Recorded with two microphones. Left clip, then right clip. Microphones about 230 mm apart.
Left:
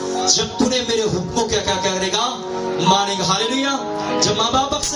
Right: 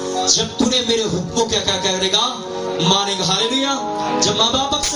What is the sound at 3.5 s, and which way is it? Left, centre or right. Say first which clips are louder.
Speech: right 1 dB; left.